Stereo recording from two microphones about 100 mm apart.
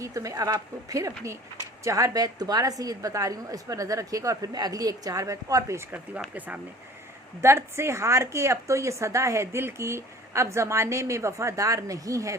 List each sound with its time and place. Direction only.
0.0 s a woman's voice: 35° right (ahead or behind)
6.3 s speech: 15° right (ahead or behind)
7.4 s a woman's voice: 25° right (ahead or behind)